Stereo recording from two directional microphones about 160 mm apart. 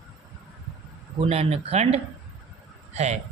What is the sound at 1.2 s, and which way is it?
A man's voice, 35° right (ahead or behind).